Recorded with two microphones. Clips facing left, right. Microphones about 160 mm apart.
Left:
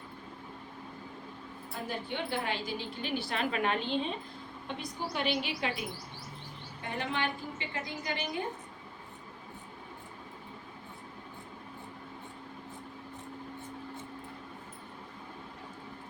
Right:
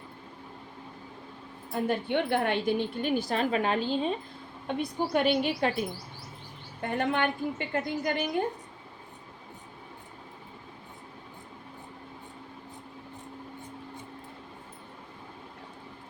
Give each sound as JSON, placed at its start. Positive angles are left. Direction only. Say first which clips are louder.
{"t": 1.7, "sound": "a woman's voice", "louder": "right 10 dB", "side_deg": -60}
{"t": 4.7, "sound": "a woman's voice", "louder": "right 9 dB", "side_deg": -55}
{"t": 6.8, "sound": "a woman's voice", "louder": "right 7 dB", "side_deg": -55}